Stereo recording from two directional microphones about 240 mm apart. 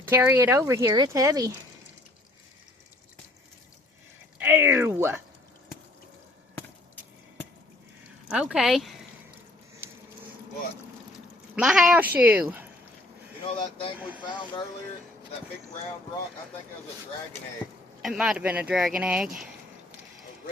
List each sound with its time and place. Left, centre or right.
0.0 s speech: centre
4.4 s speech: centre
8.3 s speech: centre
9.8 s a sound: centre
11.5 s speech: centre
13.4 s speech: left
18.0 s speech: centre